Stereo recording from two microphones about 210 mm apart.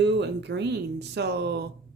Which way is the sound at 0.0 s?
55° right (ahead or behind).